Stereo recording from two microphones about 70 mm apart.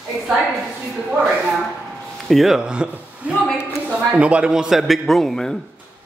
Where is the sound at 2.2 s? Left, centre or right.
Centre.